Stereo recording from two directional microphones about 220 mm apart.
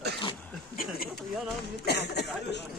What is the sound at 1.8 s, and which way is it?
Speech, 50° left (ahead or behind).